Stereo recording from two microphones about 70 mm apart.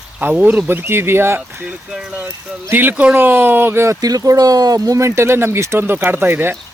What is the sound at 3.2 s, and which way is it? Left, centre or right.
Speech, right.